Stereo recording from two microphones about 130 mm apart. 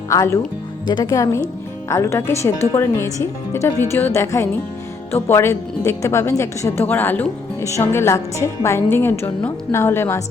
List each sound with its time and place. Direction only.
0.1 s a woman's voice: 25° left (ahead or behind)